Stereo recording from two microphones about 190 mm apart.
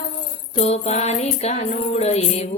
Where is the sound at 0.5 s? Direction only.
35° left (ahead or behind).